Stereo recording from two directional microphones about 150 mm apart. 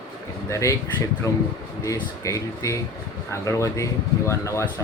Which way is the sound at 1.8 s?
20° left (ahead or behind).